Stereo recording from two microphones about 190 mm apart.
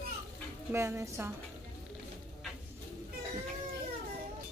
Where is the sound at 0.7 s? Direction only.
15° right (ahead or behind).